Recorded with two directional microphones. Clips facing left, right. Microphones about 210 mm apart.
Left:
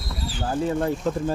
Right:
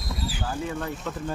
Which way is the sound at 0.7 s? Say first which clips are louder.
Left 8 dB; 35° left (ahead or behind).